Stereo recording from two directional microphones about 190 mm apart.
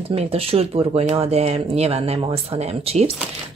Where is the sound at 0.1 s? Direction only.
30° right (ahead or behind).